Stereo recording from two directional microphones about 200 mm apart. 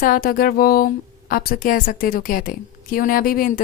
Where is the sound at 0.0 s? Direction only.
45° left (ahead or behind).